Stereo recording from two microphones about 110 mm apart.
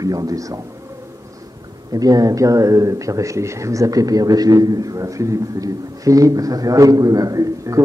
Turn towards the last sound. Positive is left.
turn(degrees=-30)  # may be behind; listen again after turning